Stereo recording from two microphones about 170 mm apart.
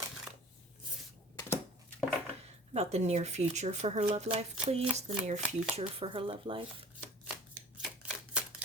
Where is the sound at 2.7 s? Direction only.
40° right (ahead or behind).